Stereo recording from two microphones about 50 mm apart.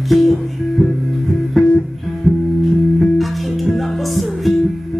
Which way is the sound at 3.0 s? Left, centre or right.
Centre.